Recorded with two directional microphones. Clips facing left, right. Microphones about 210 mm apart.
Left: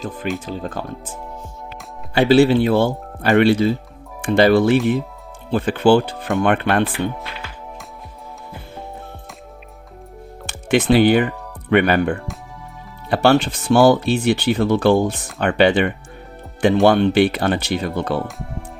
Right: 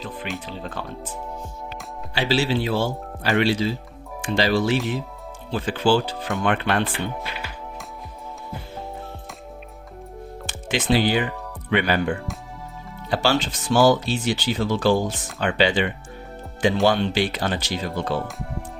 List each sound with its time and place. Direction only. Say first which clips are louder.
0.3 s speech: left 5 dB; 45° left (ahead or behind)
2.1 s speech: left 9 dB; 55° left (ahead or behind)
7.2 s music: even; centre (ahead or behind)
10.4 s speech: left 8 dB; 60° left (ahead or behind)